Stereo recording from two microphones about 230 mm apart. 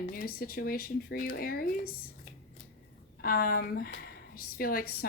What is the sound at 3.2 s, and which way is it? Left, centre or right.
A woman's voice, left.